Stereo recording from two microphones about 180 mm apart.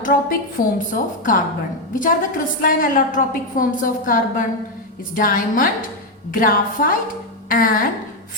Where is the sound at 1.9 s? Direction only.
50° left (ahead or behind).